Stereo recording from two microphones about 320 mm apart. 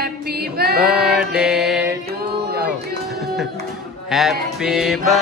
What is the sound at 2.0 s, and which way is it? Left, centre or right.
Mantra, right.